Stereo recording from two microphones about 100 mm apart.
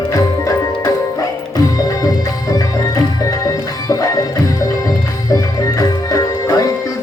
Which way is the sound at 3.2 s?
35° left (ahead or behind).